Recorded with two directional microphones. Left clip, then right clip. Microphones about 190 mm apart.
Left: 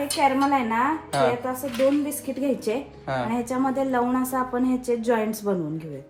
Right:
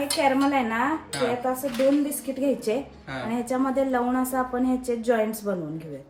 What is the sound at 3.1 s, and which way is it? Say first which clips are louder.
Speech: left 10 dB; 5° left (ahead or behind).